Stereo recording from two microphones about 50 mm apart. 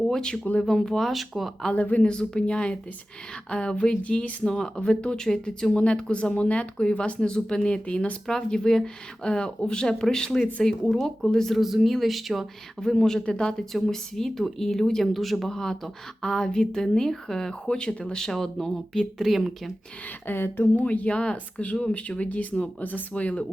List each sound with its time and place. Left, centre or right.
0.1 s speech: centre
1.7 s speech: left
2.0 s speech: centre
8.3 s speech: centre
10.9 s speech: centre
11.3 s speech: centre
11.5 s speech: centre
13.1 s speech: centre
18.3 s speech: centre
19.4 s speech: centre
20.2 s speech: left
20.8 s speech: left